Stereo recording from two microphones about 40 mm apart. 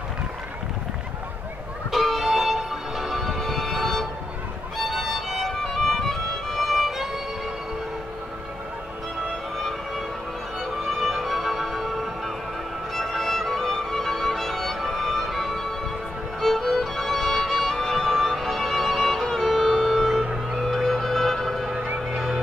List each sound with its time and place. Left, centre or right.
1.9 s music: centre
9.6 s music: centre
20.2 s music: centre
20.6 s music: centre